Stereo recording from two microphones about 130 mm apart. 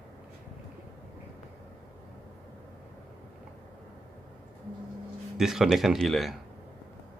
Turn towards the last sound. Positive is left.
turn(degrees=0)  # may be behind; listen again after turning